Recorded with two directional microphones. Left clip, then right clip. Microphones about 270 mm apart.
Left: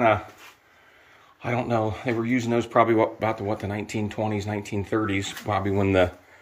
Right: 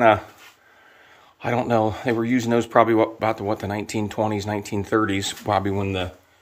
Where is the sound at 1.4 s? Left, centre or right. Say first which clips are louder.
Right 4 dB; centre.